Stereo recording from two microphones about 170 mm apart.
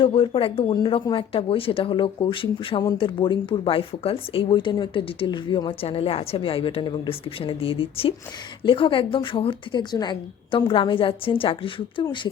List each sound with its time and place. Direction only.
0.0 s a woman's voice: 30° left (ahead or behind)